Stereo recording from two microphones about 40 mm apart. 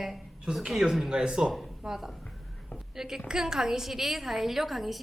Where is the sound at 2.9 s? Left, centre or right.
Centre.